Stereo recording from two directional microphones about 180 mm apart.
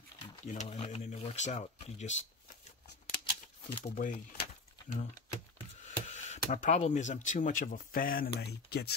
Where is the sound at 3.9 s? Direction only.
45° left (ahead or behind).